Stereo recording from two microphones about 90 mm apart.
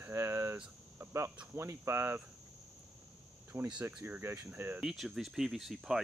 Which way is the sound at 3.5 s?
30° right (ahead or behind).